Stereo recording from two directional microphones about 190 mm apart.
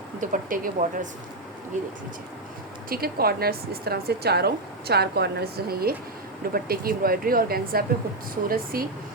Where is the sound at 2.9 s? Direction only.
50° right (ahead or behind).